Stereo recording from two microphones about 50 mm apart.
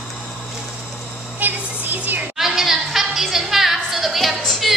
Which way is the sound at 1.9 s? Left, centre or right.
Right.